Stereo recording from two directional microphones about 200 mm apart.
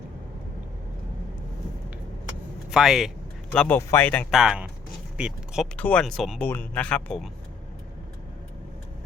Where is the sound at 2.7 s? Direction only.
Centre (ahead or behind).